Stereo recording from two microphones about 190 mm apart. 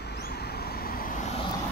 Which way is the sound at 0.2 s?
55° left (ahead or behind).